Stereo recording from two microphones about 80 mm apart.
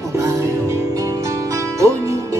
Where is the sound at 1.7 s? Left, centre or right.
Right.